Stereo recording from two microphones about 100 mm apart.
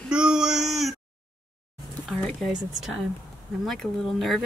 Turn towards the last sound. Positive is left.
turn(degrees=0)  # may be behind; listen again after turning